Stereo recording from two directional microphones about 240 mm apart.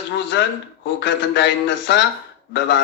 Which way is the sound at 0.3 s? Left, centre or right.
Left.